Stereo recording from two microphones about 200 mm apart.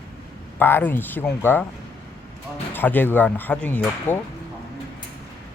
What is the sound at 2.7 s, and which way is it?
Speech, 10° left (ahead or behind).